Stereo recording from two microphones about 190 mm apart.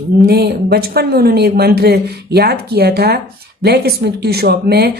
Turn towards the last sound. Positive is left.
turn(degrees=-55)  # may be behind; listen again after turning